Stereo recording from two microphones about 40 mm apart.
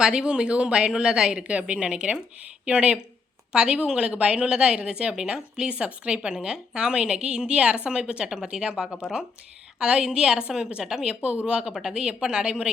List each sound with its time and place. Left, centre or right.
0.0 s a woman's voice: right
1.6 s a woman's voice: right
8.3 s a woman's voice: centre
11.1 s a woman's voice: right